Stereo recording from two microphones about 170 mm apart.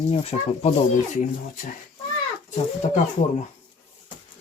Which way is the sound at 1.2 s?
55° left (ahead or behind).